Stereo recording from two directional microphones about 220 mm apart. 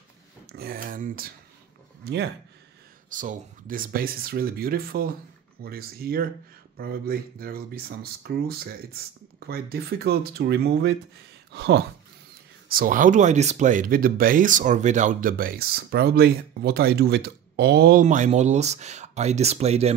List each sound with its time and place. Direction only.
0.5 s speech: 45° right (ahead or behind)
3.1 s speech: 35° right (ahead or behind)
12.7 s speech: 40° right (ahead or behind)